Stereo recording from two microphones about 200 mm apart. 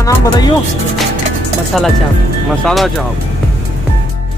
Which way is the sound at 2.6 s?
Centre (ahead or behind).